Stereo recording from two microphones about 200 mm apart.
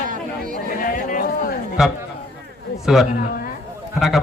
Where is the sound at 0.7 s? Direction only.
45° left (ahead or behind).